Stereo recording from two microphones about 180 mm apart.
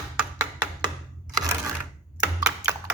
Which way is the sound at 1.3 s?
20° right (ahead or behind).